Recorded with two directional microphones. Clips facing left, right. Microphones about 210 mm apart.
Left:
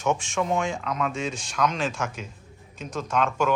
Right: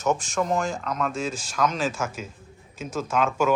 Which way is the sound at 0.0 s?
Centre (ahead or behind).